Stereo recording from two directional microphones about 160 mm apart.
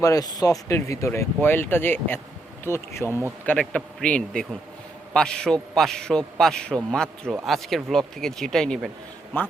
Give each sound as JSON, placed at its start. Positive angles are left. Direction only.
{"t": 0.0, "sound": "speech", "side_deg": 20}